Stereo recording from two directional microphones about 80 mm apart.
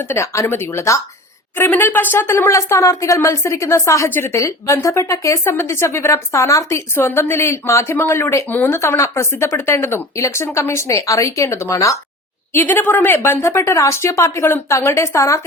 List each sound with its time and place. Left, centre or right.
0.0 s speech: left
1.5 s a woman's voice: left
4.4 s speech: left
12.5 s speech: left